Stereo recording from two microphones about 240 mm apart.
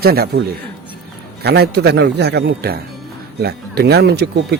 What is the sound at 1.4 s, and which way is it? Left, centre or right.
Speech, right.